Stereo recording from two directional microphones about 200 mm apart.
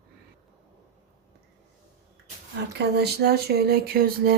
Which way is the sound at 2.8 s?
55° right (ahead or behind).